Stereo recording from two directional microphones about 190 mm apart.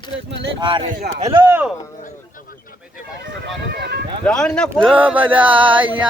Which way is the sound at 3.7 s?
60° right (ahead or behind).